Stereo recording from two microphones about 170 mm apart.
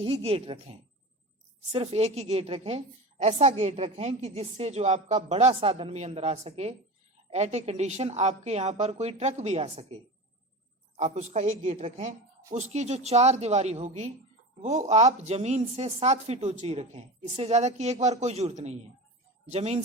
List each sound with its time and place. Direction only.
0.0 s a woman's voice: 35° right (ahead or behind)
1.7 s a woman's voice: 35° right (ahead or behind)
10.9 s a woman's voice: 40° right (ahead or behind)